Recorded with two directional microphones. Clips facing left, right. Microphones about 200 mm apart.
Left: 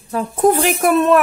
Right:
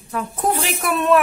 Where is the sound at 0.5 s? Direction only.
50° left (ahead or behind).